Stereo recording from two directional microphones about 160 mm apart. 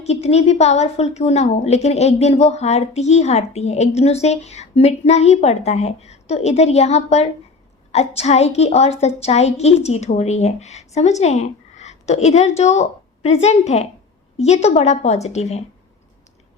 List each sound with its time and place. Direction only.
0.0 s a woman's voice: 40° left (ahead or behind)